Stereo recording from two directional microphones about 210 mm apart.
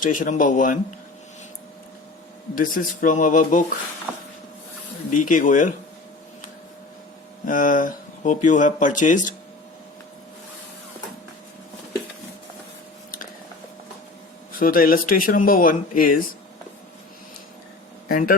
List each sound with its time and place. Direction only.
0.0 s speech: 40° left (ahead or behind)
2.6 s speech: 40° left (ahead or behind)
5.1 s speech: 40° left (ahead or behind)
7.4 s speech: 40° left (ahead or behind)
14.6 s speech: 40° left (ahead or behind)
18.1 s a man's voice: 40° left (ahead or behind)